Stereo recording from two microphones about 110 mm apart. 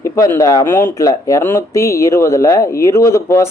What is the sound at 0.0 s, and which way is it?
Speech, 30° left (ahead or behind).